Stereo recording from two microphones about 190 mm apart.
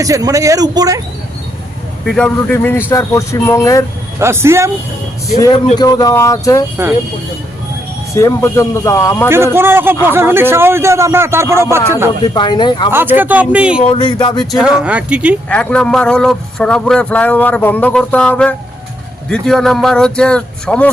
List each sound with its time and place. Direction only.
0.0 s a man's voice: 20° right (ahead or behind)
2.0 s speech: 5° left (ahead or behind)
4.2 s speech: 15° right (ahead or behind)
5.7 s speech: 20° left (ahead or behind)
8.1 s speech: 15° left (ahead or behind)
9.6 s speech: 10° right (ahead or behind)
12.3 s speech: 20° left (ahead or behind)
12.9 s speech: 10° right (ahead or behind)
13.8 s speech: 25° left (ahead or behind)
14.5 s speech: 5° right (ahead or behind)
15.4 s a man's voice: 5° left (ahead or behind)